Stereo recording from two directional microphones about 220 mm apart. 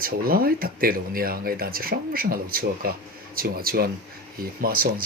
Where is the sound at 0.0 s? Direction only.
40° right (ahead or behind).